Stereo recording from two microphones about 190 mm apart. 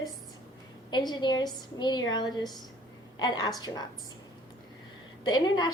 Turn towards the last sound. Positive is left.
turn(degrees=20)  # may be behind; listen again after turning